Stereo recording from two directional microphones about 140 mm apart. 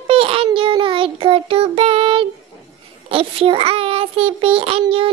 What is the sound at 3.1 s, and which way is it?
A child's voice, 40° right (ahead or behind).